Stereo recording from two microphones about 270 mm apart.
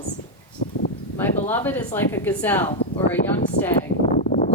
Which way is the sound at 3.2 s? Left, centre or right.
Left.